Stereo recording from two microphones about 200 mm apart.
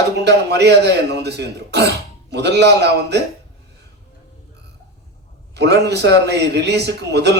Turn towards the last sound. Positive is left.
turn(degrees=-55)  # may be behind; listen again after turning